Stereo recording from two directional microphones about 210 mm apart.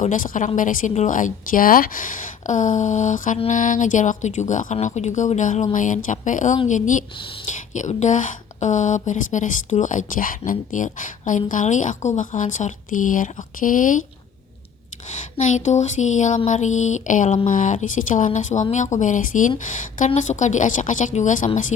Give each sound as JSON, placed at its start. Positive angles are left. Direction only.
{"t": 0.0, "sound": "a woman's voice", "side_deg": 35}
{"t": 15.4, "sound": "a woman's voice", "side_deg": 35}